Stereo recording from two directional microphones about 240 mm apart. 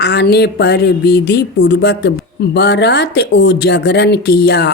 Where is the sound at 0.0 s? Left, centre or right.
Left.